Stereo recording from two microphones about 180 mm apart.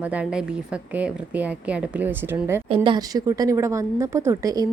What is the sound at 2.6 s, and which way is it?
A woman's voice, 30° right (ahead or behind).